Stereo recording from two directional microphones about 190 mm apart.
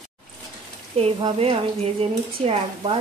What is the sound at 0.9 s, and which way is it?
A woman's voice, 30° right (ahead or behind).